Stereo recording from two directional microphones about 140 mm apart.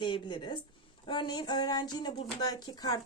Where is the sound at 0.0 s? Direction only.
35° left (ahead or behind).